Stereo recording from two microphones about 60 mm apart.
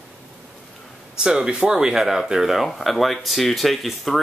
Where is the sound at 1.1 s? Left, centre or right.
Centre.